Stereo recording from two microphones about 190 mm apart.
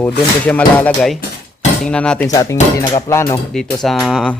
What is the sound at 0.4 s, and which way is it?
Speech, 5° left (ahead or behind).